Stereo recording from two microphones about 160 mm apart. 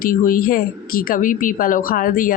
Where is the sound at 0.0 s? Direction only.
60° left (ahead or behind).